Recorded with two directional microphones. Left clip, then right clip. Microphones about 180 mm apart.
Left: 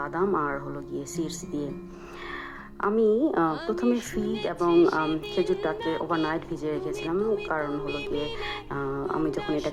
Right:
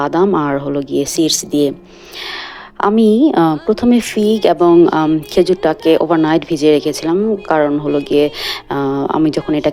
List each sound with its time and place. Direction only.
0.0 s speech: 35° right (ahead or behind)
2.8 s speech: 30° right (ahead or behind)